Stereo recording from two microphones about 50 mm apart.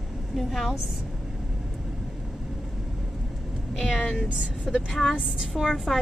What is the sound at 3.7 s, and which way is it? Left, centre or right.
A woman's voice, centre.